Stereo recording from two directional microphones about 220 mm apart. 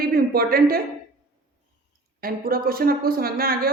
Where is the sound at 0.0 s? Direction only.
45° right (ahead or behind).